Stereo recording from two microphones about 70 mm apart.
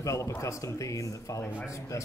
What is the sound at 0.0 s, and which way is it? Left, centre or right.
Speech, left.